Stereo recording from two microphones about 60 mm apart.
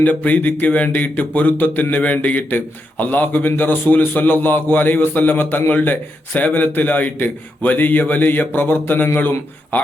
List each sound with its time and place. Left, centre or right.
0.0 s a man's voice: left